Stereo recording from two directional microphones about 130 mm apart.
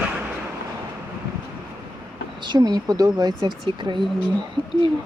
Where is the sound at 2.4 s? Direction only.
35° right (ahead or behind).